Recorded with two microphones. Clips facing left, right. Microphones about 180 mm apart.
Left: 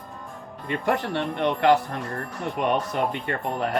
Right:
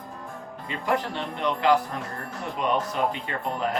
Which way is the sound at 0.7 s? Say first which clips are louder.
Left 2 dB; 60° left (ahead or behind).